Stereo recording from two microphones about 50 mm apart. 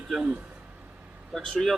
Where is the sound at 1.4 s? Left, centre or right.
Centre.